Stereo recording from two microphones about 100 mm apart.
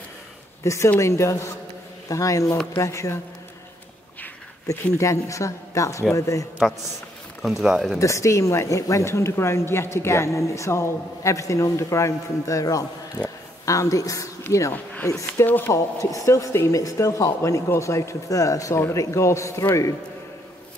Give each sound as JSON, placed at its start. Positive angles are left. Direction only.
{"t": 0.8, "sound": "speech", "side_deg": 25}
{"t": 4.6, "sound": "speech", "side_deg": 30}
{"t": 7.4, "sound": "speech", "side_deg": -5}
{"t": 8.0, "sound": "speech", "side_deg": 30}
{"t": 15.2, "sound": "speech", "side_deg": 20}
{"t": 15.7, "sound": "speech", "side_deg": 30}